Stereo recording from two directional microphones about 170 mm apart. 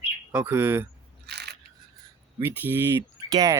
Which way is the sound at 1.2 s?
75° right (ahead or behind).